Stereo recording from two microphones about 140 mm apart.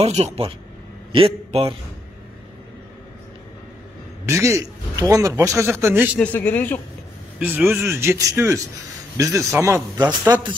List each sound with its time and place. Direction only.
0.0 s a man's voice: 45° right (ahead or behind)
4.3 s a man's voice: 20° right (ahead or behind)
6.1 s a man's voice: 10° left (ahead or behind)
7.3 s a man's voice: 15° right (ahead or behind); by 10.5 s 30° right (ahead or behind)